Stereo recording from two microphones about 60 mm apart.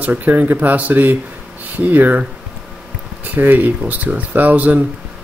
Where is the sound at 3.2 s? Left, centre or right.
Right.